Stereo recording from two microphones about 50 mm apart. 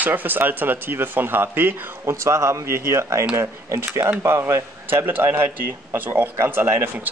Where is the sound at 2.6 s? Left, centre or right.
Right.